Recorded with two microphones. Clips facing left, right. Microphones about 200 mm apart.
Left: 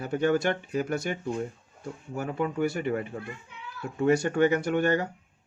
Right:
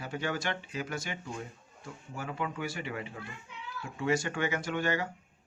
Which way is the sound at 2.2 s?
40° left (ahead or behind).